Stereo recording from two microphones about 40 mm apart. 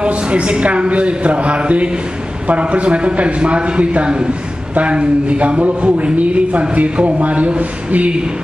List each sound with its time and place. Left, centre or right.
0.0 s a man's voice: right